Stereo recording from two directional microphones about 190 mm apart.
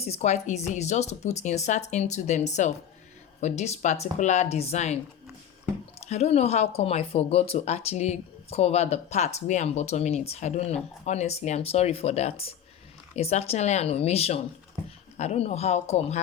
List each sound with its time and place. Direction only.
0.0 s speech: 35° left (ahead or behind)
6.1 s speech: 35° left (ahead or behind)